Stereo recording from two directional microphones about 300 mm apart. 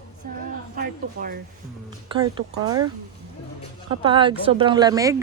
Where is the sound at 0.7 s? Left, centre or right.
Right.